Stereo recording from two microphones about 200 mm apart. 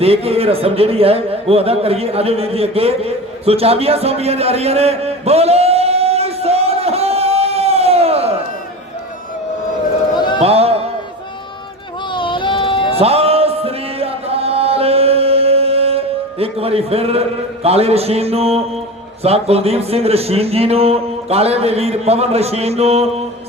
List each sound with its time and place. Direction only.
0.0 s speech: 30° right (ahead or behind)
10.4 s music: 30° right (ahead or behind)
12.1 s a sound: 25° left (ahead or behind)
13.0 s music: 30° right (ahead or behind)
19.2 s a man's voice: 30° right (ahead or behind)